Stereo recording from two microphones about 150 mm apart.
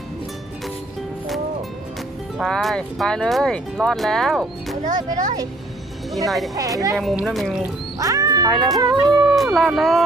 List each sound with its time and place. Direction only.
2.4 s speech: centre (ahead or behind)
4.8 s speech: 55° right (ahead or behind)
6.1 s speech: centre (ahead or behind)
6.6 s a sound: 20° right (ahead or behind)
6.9 s speech: centre (ahead or behind)
7.9 s speech: 25° right (ahead or behind)
8.8 s a sound: 25° right (ahead or behind)
9.6 s speech: centre (ahead or behind)